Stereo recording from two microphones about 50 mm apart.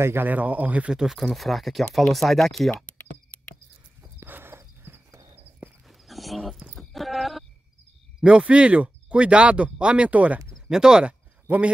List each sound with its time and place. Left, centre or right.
0.0 s speech: right
0.3 s speech: right
0.8 s speech: centre
2.7 s a sound: left
4.3 s horse: right
4.6 s a sound: right
5.9 s walk: centre
6.8 s a sound: centre
8.2 s speech: right
10.7 s speech: centre